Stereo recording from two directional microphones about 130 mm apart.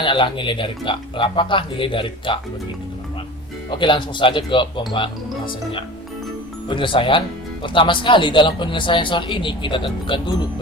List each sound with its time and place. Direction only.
0.0 s speech: 40° left (ahead or behind)
3.7 s speech: 40° left (ahead or behind)
6.7 s speech: 40° left (ahead or behind)